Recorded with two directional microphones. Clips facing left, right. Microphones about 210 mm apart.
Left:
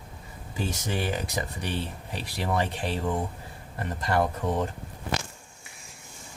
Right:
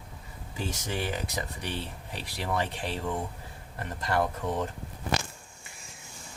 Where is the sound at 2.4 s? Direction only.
40° left (ahead or behind).